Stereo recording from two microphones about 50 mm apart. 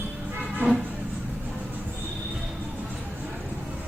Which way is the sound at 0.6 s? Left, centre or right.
Right.